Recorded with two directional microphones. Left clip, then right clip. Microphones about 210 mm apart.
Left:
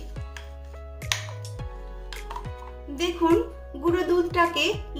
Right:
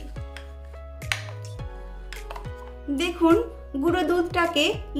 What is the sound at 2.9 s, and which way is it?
Speech, 35° right (ahead or behind).